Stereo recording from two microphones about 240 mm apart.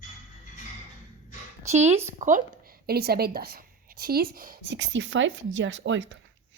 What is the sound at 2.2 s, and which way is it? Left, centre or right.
A woman's voice, right.